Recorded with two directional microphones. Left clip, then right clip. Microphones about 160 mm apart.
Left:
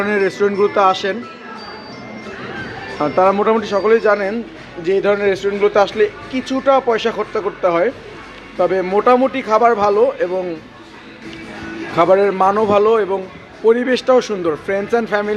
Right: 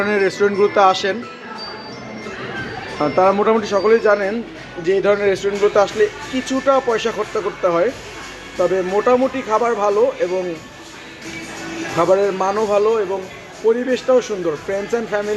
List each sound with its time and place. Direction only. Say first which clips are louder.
0.0 s speech: even; centre (ahead or behind)
3.2 s speech: left 1 dB; centre (ahead or behind)
4.1 s a man's voice: even; 10° left (ahead or behind)
8.5 s a man's voice: left 2 dB; 5° left (ahead or behind)
11.9 s a man's voice: left 3 dB; 10° left (ahead or behind)